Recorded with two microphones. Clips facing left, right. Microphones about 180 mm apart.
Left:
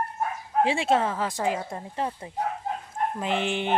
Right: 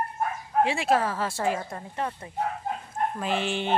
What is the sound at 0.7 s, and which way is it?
Speech, 25° left (ahead or behind).